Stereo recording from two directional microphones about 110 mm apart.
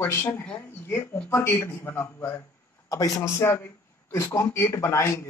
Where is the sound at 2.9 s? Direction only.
30° left (ahead or behind).